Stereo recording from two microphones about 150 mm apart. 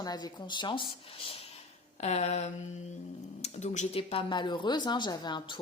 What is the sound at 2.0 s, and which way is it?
Speech, 50° left (ahead or behind).